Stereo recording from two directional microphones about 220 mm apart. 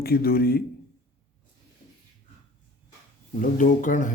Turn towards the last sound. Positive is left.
turn(degrees=35)  # may be behind; listen again after turning